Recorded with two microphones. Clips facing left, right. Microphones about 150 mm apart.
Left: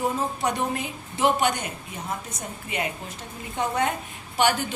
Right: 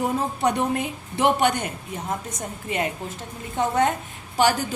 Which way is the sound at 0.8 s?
55° right (ahead or behind).